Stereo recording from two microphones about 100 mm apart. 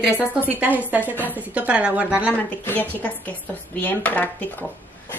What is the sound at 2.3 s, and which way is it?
Speech, 20° left (ahead or behind).